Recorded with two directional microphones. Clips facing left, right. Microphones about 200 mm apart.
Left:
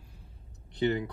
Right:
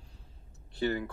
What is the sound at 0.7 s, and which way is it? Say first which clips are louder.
Speech: left 3 dB; 20° left (ahead or behind).